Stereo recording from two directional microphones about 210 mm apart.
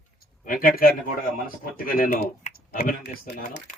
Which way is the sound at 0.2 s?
45° left (ahead or behind).